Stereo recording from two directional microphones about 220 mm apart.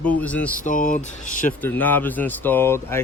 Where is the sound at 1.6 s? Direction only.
10° left (ahead or behind).